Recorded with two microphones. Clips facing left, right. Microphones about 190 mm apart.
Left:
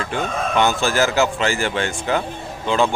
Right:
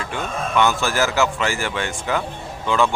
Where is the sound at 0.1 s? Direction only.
30° left (ahead or behind).